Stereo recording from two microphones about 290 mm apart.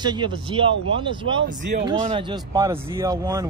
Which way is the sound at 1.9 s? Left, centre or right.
Centre.